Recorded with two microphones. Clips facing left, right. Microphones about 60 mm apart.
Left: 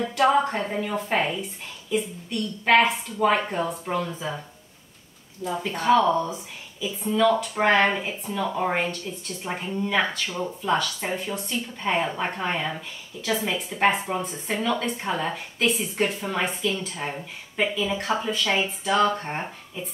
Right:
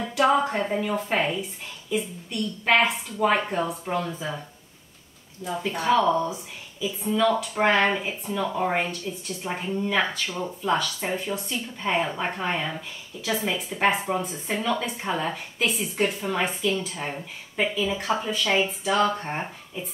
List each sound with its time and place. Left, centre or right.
0.1 s a woman's voice: centre
5.5 s a woman's voice: centre